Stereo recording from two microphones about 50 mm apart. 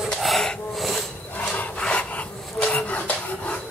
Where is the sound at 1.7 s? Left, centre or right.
Left.